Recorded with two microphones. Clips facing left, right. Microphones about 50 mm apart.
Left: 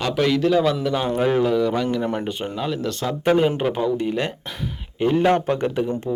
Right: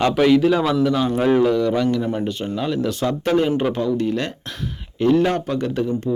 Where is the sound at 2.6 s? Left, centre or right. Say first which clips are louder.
Right 4 dB; centre.